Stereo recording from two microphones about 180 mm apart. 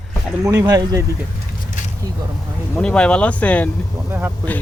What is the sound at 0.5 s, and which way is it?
Speech, 20° right (ahead or behind).